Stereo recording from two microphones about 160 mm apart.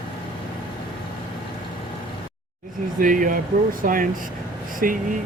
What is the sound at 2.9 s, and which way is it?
Speech, 55° right (ahead or behind).